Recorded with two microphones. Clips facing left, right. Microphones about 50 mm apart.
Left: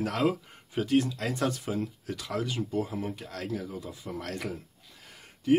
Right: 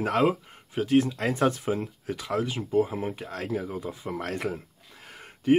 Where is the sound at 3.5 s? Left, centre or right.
Right.